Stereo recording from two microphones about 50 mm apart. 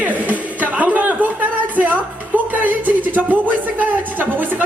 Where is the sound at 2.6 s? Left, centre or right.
Right.